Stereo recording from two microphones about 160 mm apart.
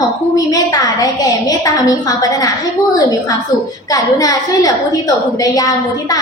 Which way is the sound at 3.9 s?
20° left (ahead or behind).